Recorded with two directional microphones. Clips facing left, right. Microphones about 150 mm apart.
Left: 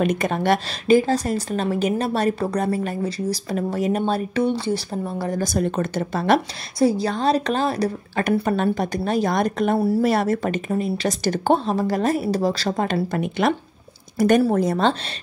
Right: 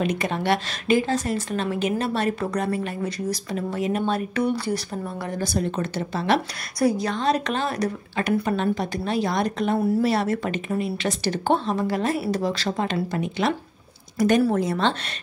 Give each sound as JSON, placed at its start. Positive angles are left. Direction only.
{"t": 0.0, "sound": "a woman's voice", "side_deg": 50}
{"t": 6.8, "sound": "a woman's voice", "side_deg": 30}
{"t": 8.2, "sound": "a woman's voice", "side_deg": 50}
{"t": 12.9, "sound": "speech", "side_deg": 55}
{"t": 14.4, "sound": "a woman's voice", "side_deg": 40}